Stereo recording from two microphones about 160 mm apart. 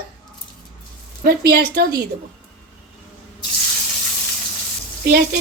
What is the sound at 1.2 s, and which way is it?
Speech, 75° right (ahead or behind).